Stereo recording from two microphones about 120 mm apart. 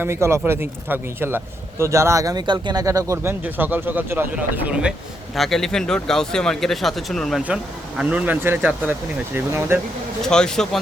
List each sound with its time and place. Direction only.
0.0 s speech: 20° right (ahead or behind)
3.4 s speech: 15° right (ahead or behind); by 7.4 s centre (ahead or behind)
7.4 s speech: 10° right (ahead or behind)
10.2 s speech: 5° left (ahead or behind)